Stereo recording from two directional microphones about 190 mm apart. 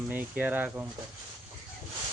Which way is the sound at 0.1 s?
10° right (ahead or behind).